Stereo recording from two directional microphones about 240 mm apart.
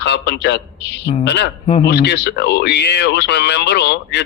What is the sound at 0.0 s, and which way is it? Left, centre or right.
A man's voice, left.